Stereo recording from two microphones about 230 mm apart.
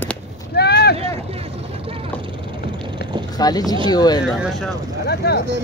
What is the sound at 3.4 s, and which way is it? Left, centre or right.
Speech, centre.